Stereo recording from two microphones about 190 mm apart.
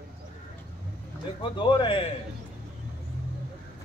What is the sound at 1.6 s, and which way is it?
Speech, 25° left (ahead or behind).